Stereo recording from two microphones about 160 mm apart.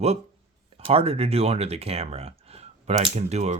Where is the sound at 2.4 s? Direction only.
40° right (ahead or behind).